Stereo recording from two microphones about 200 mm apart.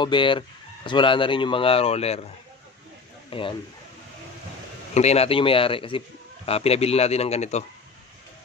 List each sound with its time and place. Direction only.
0.0 s speech: 25° left (ahead or behind)
3.3 s speech: 25° left (ahead or behind)
4.9 s a man's voice: 30° left (ahead or behind)